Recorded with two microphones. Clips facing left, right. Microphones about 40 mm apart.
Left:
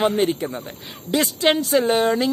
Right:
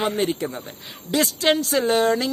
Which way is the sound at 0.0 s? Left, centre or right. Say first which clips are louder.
Left 3 dB; centre.